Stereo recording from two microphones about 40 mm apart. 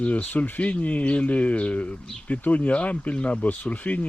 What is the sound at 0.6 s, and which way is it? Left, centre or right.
Speech, left.